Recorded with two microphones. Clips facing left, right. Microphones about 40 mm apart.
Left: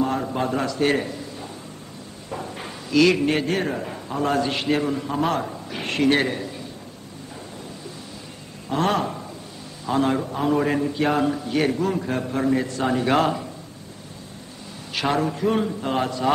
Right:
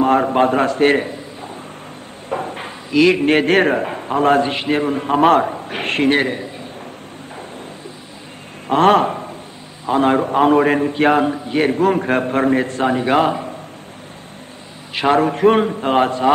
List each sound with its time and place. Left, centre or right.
0.0 s a man's voice: right
1.0 s a sound: right
2.2 s a sound: right
2.9 s a man's voice: right
3.3 s a man's voice: right
4.5 s a man's voice: right
6.0 s a man's voice: right
8.6 s a man's voice: right
11.2 s a man's voice: right
11.8 s a man's voice: right
12.8 s a man's voice: right
15.0 s a man's voice: right